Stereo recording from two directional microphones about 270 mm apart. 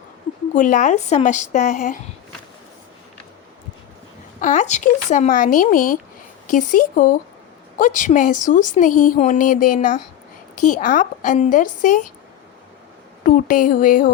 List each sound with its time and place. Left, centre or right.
0.5 s speech: left
4.4 s speech: left
13.2 s a sound: left